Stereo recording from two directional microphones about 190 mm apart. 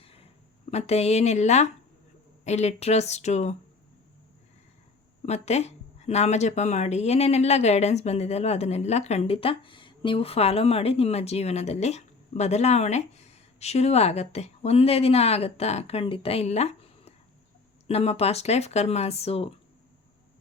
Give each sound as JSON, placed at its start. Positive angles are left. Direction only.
{"t": 0.0, "sound": "a sound", "side_deg": 30}
{"t": 2.4, "sound": "speech", "side_deg": 35}
{"t": 5.2, "sound": "speech", "side_deg": 35}